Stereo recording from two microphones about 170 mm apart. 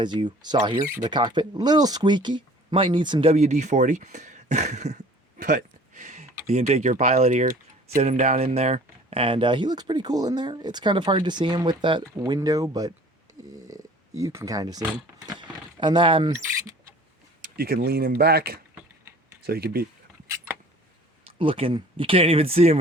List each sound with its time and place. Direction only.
0.0 s speech: 25° right (ahead or behind); by 4.9 s 45° right (ahead or behind)
5.4 s a sound: 50° right (ahead or behind)
6.5 s speech: 40° right (ahead or behind)
17.6 s speech: 60° right (ahead or behind)
21.2 s speech: 35° right (ahead or behind)